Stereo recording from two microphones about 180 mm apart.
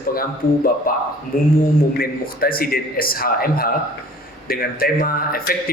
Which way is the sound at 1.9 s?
55° left (ahead or behind).